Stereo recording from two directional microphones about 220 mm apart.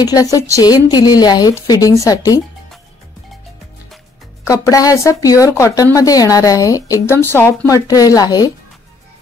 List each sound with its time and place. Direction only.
0.0 s a woman's voice: 15° left (ahead or behind)
4.5 s a woman's voice: 15° left (ahead or behind)